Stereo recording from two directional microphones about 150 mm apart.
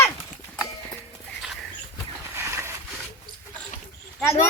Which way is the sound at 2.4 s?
20° right (ahead or behind).